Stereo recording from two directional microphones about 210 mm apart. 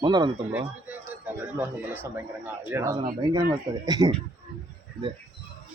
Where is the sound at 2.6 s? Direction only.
15° right (ahead or behind).